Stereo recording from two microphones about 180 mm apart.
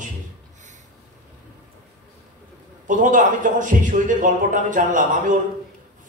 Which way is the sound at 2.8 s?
45° right (ahead or behind).